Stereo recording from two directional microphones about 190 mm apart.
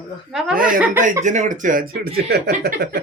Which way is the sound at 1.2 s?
40° right (ahead or behind).